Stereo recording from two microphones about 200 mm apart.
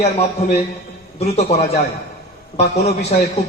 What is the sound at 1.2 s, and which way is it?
A man's voice, 30° left (ahead or behind).